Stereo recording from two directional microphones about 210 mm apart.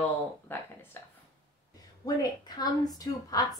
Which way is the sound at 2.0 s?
20° left (ahead or behind).